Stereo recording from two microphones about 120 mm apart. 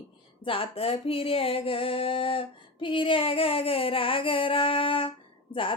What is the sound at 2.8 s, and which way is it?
Child singing, 45° left (ahead or behind).